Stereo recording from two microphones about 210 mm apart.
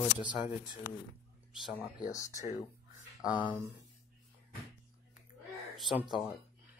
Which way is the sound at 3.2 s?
5° right (ahead or behind).